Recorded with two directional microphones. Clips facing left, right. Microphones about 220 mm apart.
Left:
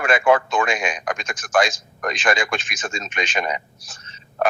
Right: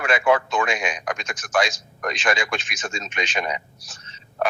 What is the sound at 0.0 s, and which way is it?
Speech, 50° left (ahead or behind).